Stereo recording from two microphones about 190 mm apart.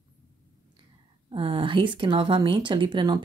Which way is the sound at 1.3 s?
25° right (ahead or behind).